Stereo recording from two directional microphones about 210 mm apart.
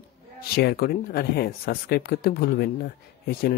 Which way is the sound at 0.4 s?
45° left (ahead or behind).